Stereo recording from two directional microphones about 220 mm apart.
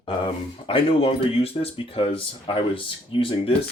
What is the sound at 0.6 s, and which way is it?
Speech, 25° left (ahead or behind).